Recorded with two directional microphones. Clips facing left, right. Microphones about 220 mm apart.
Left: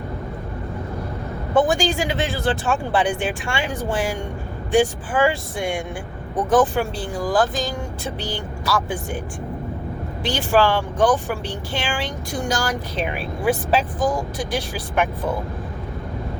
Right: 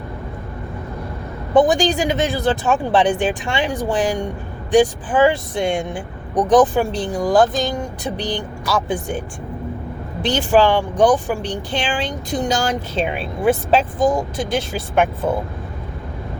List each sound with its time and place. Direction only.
1.5 s speech: 20° right (ahead or behind)
10.5 s speech: 15° right (ahead or behind)